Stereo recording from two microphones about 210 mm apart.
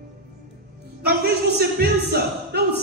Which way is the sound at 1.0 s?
50° right (ahead or behind).